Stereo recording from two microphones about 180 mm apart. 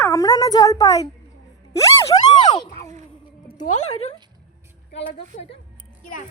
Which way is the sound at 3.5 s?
40° left (ahead or behind).